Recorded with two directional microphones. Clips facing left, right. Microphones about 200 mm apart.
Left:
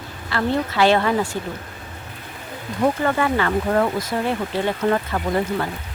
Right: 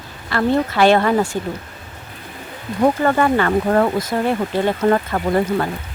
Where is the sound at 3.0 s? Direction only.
45° right (ahead or behind).